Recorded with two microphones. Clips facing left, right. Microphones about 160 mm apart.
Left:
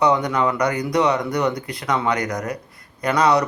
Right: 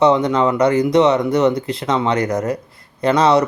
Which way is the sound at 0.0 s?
25° right (ahead or behind).